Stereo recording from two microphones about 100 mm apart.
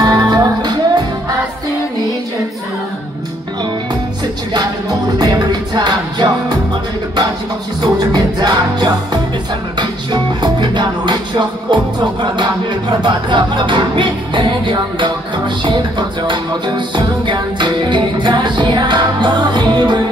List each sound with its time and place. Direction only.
0.0 s music: 40° right (ahead or behind)
5.2 s music: 45° right (ahead or behind)
7.8 s music: 45° right (ahead or behind)